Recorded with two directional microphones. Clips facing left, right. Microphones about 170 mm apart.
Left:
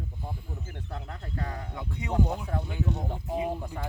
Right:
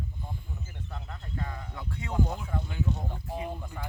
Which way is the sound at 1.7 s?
20° left (ahead or behind).